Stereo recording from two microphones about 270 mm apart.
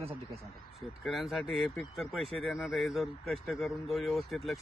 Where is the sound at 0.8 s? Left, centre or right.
Centre.